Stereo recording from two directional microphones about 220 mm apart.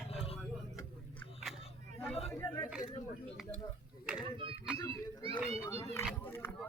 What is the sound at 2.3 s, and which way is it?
Speech, 15° left (ahead or behind).